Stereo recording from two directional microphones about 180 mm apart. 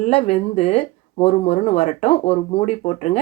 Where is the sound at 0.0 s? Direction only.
35° left (ahead or behind).